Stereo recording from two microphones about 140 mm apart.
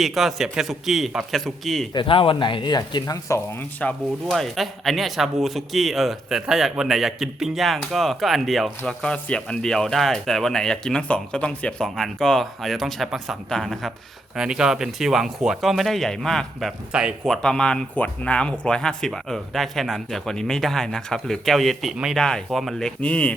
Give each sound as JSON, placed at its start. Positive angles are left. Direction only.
{"t": 0.0, "sound": "speech", "side_deg": 0}
{"t": 1.9, "sound": "speech", "side_deg": 35}